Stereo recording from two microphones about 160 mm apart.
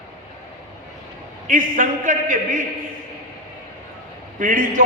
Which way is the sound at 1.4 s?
60° right (ahead or behind).